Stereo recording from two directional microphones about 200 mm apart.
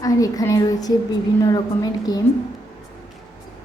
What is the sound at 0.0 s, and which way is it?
A woman's voice, 15° left (ahead or behind).